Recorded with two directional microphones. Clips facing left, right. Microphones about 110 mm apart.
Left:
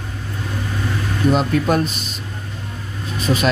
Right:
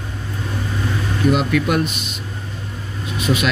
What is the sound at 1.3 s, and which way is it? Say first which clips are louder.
Speech: left 1 dB; 35° left (ahead or behind).